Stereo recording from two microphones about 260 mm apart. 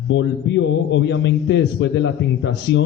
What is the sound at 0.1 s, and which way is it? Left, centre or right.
A man's voice, left.